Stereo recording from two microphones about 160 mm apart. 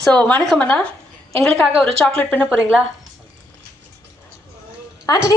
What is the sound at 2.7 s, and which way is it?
Speech, 5° right (ahead or behind).